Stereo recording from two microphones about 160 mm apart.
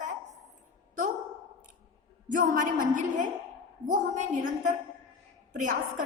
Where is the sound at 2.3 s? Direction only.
55° right (ahead or behind).